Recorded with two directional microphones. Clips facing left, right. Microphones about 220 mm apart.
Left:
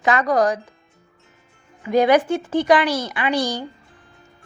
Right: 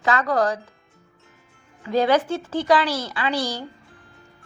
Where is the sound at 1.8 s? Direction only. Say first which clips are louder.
Left 3 dB; 15° left (ahead or behind).